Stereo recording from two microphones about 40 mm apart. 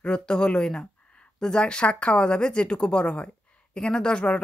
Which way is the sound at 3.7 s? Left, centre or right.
Left.